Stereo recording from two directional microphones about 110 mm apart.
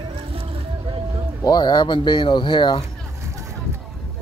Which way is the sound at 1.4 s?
40° left (ahead or behind).